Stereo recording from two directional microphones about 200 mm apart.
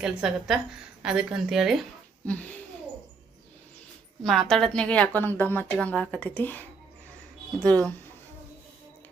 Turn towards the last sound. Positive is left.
turn(degrees=5)  # may be behind; listen again after turning